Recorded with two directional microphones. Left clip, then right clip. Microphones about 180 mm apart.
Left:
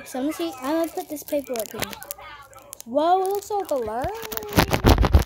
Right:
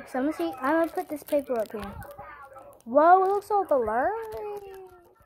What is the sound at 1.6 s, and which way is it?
Speech, 35° left (ahead or behind).